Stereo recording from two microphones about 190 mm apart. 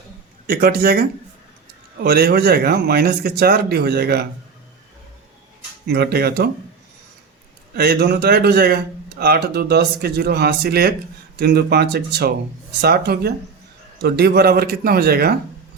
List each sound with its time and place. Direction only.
0.4 s a man's voice: 50° right (ahead or behind)
2.0 s speech: 55° right (ahead or behind)
5.9 s speech: 55° right (ahead or behind)
7.8 s a man's voice: 55° right (ahead or behind)